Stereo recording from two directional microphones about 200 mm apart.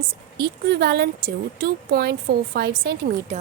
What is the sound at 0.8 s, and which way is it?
A woman's voice, 50° right (ahead or behind).